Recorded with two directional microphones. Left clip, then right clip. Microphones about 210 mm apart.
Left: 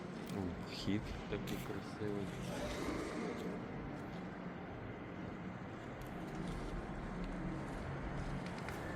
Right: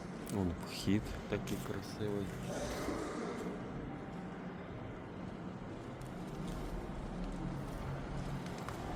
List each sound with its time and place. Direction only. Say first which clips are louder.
0.9 s speech: right 5 dB; 60° right (ahead or behind)